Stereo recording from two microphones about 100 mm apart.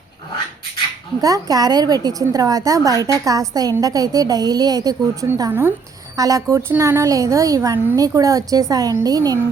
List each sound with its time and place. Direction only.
1.2 s a woman's voice: 35° right (ahead or behind)
5.5 s speech: 20° right (ahead or behind)
6.1 s a woman's voice: 35° right (ahead or behind)